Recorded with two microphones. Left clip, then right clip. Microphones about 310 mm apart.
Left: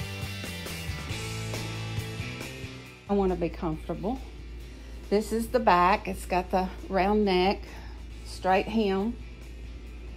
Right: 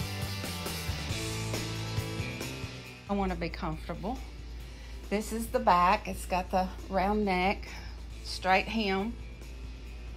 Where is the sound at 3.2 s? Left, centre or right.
Right.